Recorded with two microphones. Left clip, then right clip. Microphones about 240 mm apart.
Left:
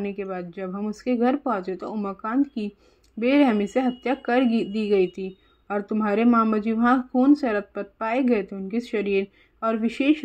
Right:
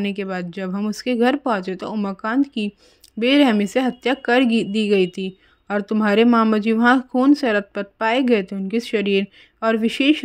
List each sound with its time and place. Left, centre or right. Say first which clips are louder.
0.0 s speech: right 4 dB; right